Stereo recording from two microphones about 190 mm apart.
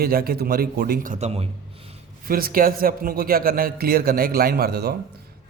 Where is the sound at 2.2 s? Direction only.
50° right (ahead or behind).